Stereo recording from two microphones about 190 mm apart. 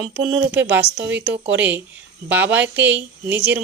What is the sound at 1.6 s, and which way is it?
Speech, 10° right (ahead or behind).